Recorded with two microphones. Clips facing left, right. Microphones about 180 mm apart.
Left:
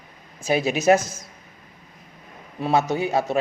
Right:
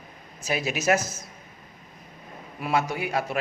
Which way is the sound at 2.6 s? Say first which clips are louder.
Left 5 dB; 25° left (ahead or behind).